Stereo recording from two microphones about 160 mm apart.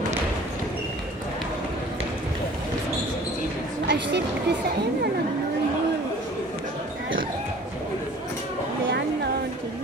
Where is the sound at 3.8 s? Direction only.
90° right.